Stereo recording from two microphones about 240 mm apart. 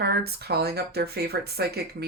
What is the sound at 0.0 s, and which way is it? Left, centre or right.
Speech, right.